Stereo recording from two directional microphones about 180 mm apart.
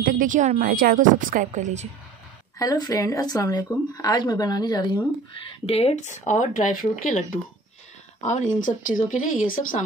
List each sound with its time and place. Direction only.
0.0 s a woman's voice: 50° right (ahead or behind)
2.6 s speech: 20° left (ahead or behind)
5.3 s speech: 35° left (ahead or behind); by 9.8 s 50° left (ahead or behind)